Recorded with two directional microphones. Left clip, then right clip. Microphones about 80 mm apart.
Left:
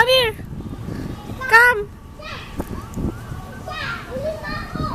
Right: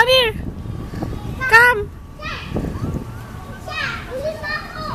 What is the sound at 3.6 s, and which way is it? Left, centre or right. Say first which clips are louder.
Children playing: right 4 dB; right.